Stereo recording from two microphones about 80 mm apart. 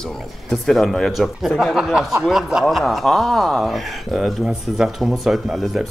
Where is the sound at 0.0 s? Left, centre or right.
Centre.